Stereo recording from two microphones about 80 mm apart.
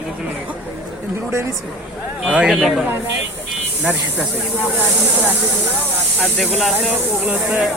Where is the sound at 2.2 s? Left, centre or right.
Centre.